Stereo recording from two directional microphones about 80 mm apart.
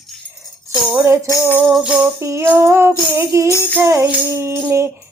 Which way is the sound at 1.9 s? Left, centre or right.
Right.